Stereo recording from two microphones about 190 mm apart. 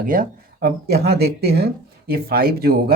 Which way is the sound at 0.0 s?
50° right (ahead or behind).